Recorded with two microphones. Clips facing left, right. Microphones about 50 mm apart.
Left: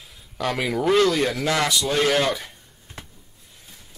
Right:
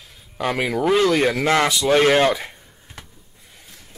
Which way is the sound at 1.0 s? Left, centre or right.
Right.